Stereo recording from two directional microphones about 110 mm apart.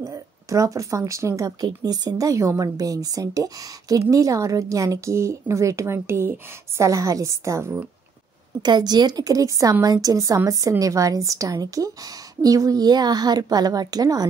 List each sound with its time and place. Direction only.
0.0 s speech: 30° right (ahead or behind)
8.6 s a woman's voice: 40° right (ahead or behind)